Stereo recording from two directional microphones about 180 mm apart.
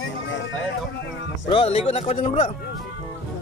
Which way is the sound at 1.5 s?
30° left (ahead or behind).